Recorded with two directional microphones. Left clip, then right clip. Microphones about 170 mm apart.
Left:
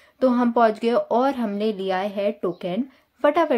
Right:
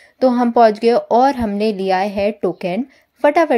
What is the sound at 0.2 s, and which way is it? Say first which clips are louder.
Speech: right 6 dB; 20° right (ahead or behind).